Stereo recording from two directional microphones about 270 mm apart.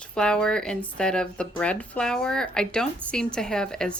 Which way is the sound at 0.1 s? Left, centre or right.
Centre.